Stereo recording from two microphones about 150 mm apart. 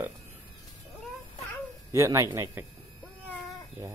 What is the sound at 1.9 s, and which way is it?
Speech, 20° right (ahead or behind).